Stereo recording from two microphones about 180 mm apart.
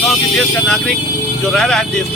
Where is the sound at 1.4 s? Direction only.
5° left (ahead or behind).